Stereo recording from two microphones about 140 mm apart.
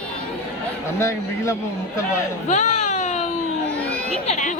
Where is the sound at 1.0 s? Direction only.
20° left (ahead or behind).